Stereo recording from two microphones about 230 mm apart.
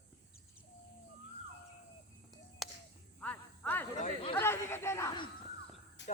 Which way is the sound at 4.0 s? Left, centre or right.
Left.